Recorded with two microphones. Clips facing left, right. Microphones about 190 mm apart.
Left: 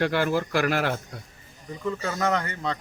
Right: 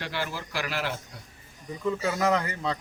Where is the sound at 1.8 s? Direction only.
10° right (ahead or behind).